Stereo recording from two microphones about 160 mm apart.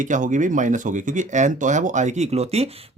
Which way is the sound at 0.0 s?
50° right (ahead or behind).